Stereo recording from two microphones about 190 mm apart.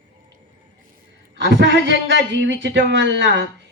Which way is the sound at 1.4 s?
75° right (ahead or behind).